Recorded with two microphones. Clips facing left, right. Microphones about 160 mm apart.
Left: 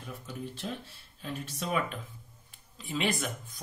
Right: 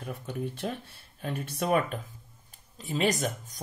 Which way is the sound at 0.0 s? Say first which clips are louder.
Right 6 dB; 60° right (ahead or behind).